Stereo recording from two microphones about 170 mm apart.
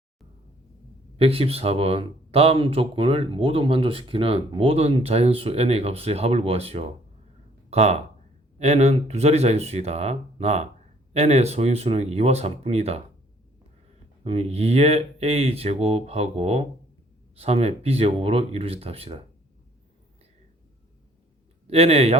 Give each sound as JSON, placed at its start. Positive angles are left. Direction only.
{"t": 1.2, "sound": "speech", "side_deg": -35}
{"t": 14.3, "sound": "speech", "side_deg": -35}
{"t": 21.7, "sound": "speech", "side_deg": -35}